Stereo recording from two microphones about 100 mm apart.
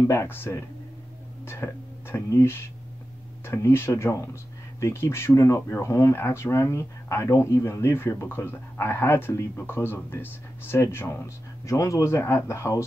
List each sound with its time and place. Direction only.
0.1 s speech: 25° left (ahead or behind)